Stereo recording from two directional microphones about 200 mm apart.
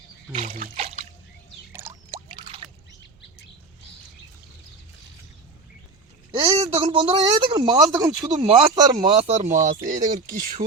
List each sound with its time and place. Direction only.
0.5 s trickle: 35° right (ahead or behind)
2.0 s a sound: 25° right (ahead or behind)
6.3 s a man's voice: 25° right (ahead or behind)
9.1 s speech: 35° right (ahead or behind)